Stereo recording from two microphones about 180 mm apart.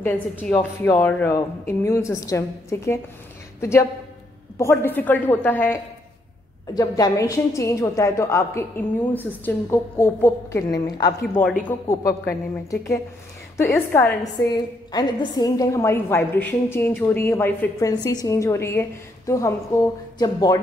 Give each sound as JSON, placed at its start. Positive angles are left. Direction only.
{"t": 0.0, "sound": "a woman's voice", "side_deg": 10}
{"t": 4.6, "sound": "a woman's voice", "side_deg": 10}
{"t": 6.7, "sound": "a woman's voice", "side_deg": 20}
{"t": 13.7, "sound": "a woman's voice", "side_deg": 10}